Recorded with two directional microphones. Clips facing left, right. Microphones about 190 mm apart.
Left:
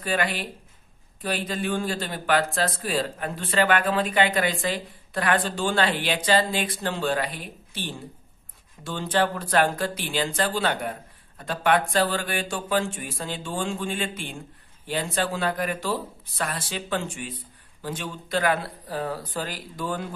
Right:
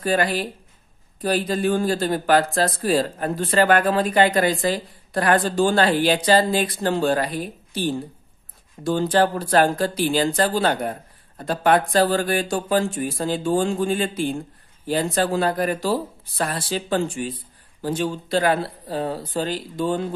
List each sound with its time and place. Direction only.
0.0 s speech: 40° right (ahead or behind)